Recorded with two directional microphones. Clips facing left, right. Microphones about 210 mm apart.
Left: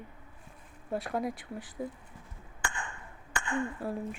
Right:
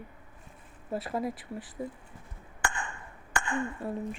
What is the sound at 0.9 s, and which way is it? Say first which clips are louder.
Speech: even; centre (ahead or behind).